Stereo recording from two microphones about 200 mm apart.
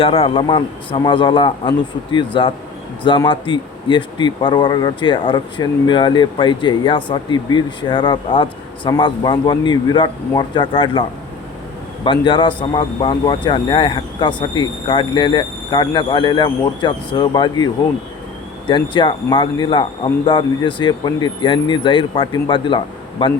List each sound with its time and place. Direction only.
0.0 s speech: 25° left (ahead or behind)
12.0 s speech: 25° left (ahead or behind)
18.7 s speech: 25° left (ahead or behind)